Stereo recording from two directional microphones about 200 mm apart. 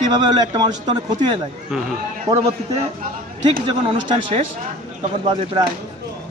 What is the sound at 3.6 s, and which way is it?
Speech, 25° right (ahead or behind).